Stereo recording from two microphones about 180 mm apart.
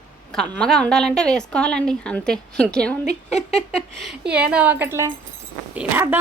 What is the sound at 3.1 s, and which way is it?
Speech, 40° left (ahead or behind).